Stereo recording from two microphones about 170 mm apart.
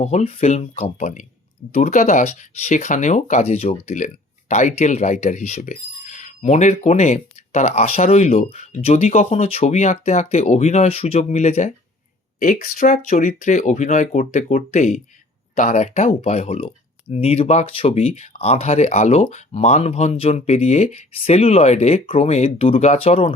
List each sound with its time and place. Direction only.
0.0 s speech: 40° left (ahead or behind)
12.4 s speech: 55° left (ahead or behind); by 23.3 s 35° left (ahead or behind)